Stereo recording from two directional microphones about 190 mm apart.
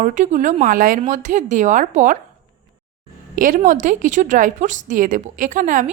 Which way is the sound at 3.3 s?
45° right (ahead or behind).